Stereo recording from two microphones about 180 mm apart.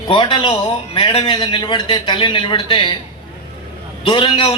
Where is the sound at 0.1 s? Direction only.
30° left (ahead or behind).